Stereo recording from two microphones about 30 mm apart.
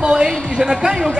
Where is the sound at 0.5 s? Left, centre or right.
Centre.